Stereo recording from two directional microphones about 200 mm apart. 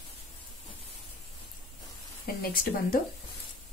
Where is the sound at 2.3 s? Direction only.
45° left (ahead or behind).